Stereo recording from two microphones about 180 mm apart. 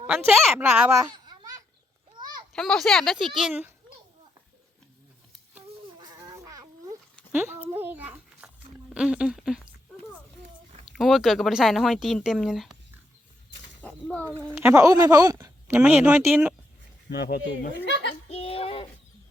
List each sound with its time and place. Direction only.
0.1 s speech: 5° right (ahead or behind)
1.1 s babbling: 25° right (ahead or behind)
2.1 s a sound: 25° right (ahead or behind)
2.5 s speech: centre (ahead or behind)
6.0 s a sound: 20° right (ahead or behind)
7.3 s a child's voice: 10° right (ahead or behind)
10.9 s speech: centre (ahead or behind)
13.8 s a sound: 10° left (ahead or behind)
14.5 s speech: 15° right (ahead or behind)
17.1 s speech: 65° left (ahead or behind)
18.3 s speech: 35° left (ahead or behind)